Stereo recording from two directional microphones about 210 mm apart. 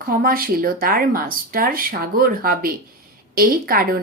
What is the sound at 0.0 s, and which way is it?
A woman's voice, 45° right (ahead or behind).